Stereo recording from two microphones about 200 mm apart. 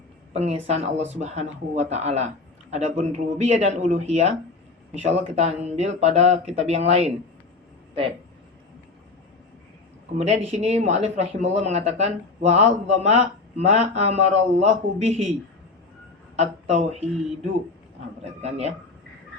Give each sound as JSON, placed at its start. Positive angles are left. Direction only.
{"t": 0.3, "sound": "speech", "side_deg": -30}
{"t": 10.2, "sound": "speech", "side_deg": -35}
{"t": 16.3, "sound": "speech", "side_deg": -35}
{"t": 18.2, "sound": "speech", "side_deg": -30}